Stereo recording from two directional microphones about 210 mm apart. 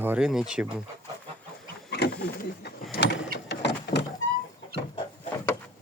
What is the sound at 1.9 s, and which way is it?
Wild animals, 50° left (ahead or behind).